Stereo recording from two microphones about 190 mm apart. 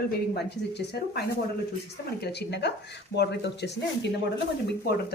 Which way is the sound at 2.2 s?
65° left (ahead or behind).